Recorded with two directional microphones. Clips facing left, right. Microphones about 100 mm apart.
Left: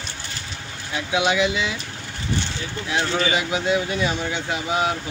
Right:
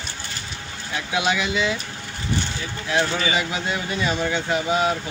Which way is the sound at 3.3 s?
15° left (ahead or behind).